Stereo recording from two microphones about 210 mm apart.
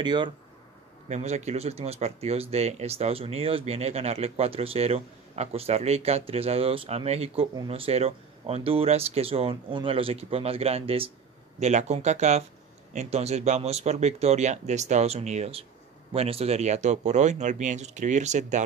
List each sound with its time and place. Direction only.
0.0 s speech: 20° right (ahead or behind)
1.0 s speech: 30° right (ahead or behind)